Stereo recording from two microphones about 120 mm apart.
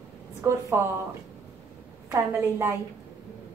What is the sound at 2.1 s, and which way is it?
Speech, 25° right (ahead or behind).